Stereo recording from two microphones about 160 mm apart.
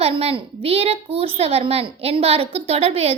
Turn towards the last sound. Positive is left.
turn(degrees=-35)  # may be behind; listen again after turning